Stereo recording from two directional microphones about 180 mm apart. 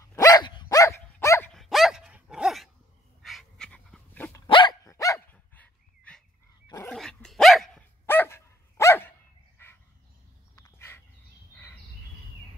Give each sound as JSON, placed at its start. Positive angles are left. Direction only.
{"t": 0.0, "sound": "dog", "side_deg": 15}
{"t": 1.5, "sound": "dog", "side_deg": 0}
{"t": 4.5, "sound": "dog", "side_deg": 25}
{"t": 8.1, "sound": "dog", "side_deg": 15}
{"t": 9.6, "sound": "a sound", "side_deg": 10}
{"t": 10.5, "sound": "dog", "side_deg": 15}